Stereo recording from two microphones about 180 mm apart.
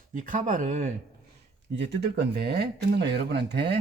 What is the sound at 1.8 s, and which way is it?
Speech, 70° right (ahead or behind).